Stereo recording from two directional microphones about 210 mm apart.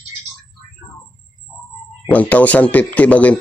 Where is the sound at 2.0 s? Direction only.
5° left (ahead or behind).